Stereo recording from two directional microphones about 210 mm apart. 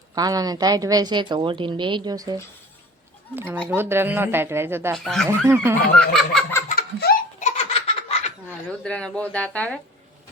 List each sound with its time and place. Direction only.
0.1 s speech: 15° right (ahead or behind)
4.9 s speech: centre (ahead or behind)
6.0 s a sound: 5° left (ahead or behind)
6.7 s laughter: 45° left (ahead or behind); by 8.3 s 30° left (ahead or behind)
8.8 s speech: 5° left (ahead or behind)